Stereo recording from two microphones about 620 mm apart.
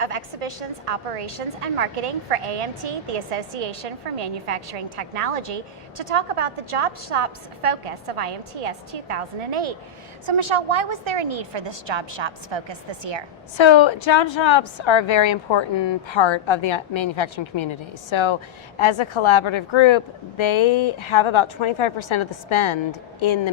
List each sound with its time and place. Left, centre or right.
0.0 s a woman's voice: right
13.6 s a woman's voice: left